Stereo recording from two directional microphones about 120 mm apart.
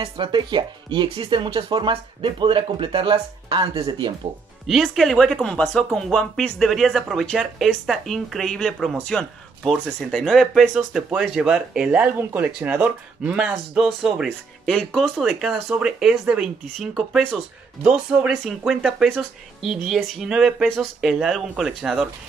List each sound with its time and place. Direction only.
0.0 s speech: 40° right (ahead or behind)
4.6 s speech: centre (ahead or behind)
17.8 s speech: 10° right (ahead or behind)